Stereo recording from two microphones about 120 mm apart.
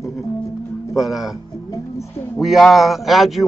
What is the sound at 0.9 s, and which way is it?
Speech, 5° right (ahead or behind).